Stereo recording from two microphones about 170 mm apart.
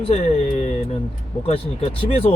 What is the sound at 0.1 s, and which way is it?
Speech, 40° left (ahead or behind).